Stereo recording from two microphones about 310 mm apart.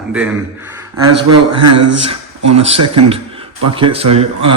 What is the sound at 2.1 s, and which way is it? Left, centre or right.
Speech, centre.